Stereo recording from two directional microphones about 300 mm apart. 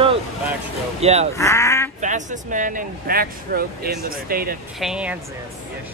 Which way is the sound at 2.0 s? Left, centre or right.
Right.